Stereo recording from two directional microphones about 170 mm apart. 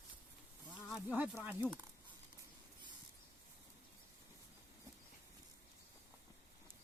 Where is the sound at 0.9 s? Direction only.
10° right (ahead or behind).